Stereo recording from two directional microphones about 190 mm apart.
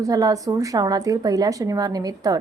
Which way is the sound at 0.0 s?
20° right (ahead or behind).